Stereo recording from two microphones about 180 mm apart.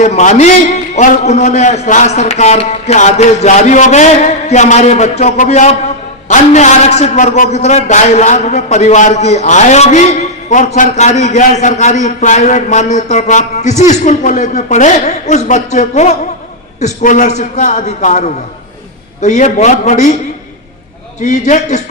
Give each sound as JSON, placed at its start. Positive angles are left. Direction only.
{"t": 0.0, "sound": "a man's voice", "side_deg": 40}
{"t": 21.2, "sound": "a man's voice", "side_deg": 40}